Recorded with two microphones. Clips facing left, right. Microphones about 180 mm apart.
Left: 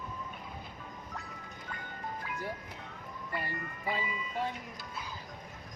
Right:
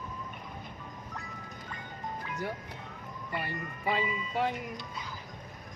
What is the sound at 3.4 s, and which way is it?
Speech, 70° right (ahead or behind).